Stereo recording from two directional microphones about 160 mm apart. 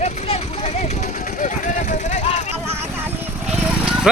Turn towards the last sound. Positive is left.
turn(degrees=-5)  # may be behind; listen again after turning